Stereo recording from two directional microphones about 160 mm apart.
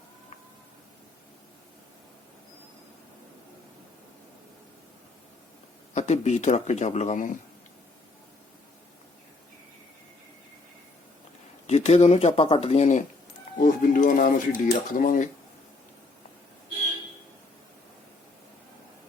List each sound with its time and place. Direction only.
5.9 s speech: 45° left (ahead or behind)
11.6 s speech: 40° left (ahead or behind)
13.6 s speech: 55° left (ahead or behind)